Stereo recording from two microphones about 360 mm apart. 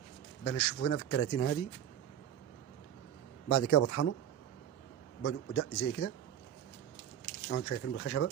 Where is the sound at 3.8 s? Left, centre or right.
Left.